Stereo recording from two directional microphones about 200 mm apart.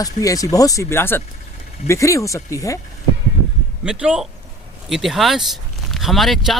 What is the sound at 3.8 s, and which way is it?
A man's voice, 5° right (ahead or behind).